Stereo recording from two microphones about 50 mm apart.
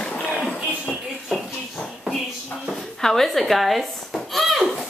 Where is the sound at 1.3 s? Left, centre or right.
Centre.